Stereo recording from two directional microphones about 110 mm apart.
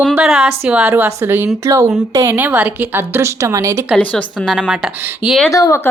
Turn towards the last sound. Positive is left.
turn(degrees=30)  # may be behind; listen again after turning